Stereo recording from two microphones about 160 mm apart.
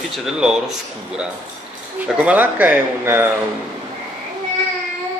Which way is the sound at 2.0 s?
10° right (ahead or behind).